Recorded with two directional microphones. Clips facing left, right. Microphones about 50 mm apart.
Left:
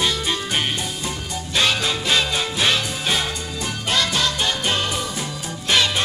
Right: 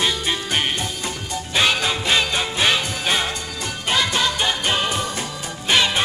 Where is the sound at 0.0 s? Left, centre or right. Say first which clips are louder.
Even; centre.